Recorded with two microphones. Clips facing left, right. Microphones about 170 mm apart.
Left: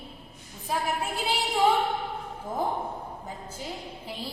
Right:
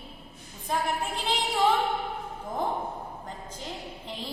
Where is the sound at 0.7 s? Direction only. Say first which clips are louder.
Even; 5° left (ahead or behind).